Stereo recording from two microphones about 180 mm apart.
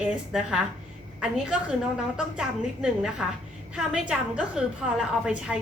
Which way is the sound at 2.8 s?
5° right (ahead or behind).